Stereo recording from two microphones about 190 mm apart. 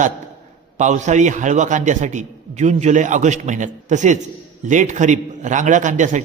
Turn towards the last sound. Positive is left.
turn(degrees=-40)  # may be behind; listen again after turning